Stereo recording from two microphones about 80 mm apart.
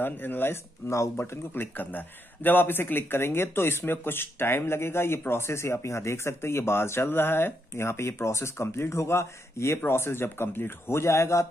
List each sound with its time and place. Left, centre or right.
0.0 s speech: left